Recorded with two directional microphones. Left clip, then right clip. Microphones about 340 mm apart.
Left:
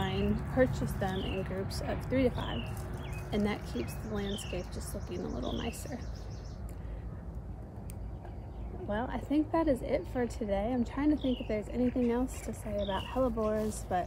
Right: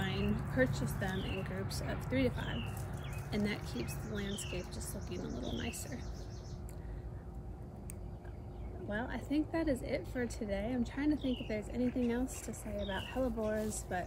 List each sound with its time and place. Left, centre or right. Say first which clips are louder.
0.0 s speech: left 4 dB; centre
8.8 s speech: left 5 dB; centre